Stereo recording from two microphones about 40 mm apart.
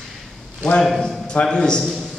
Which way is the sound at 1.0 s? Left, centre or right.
Left.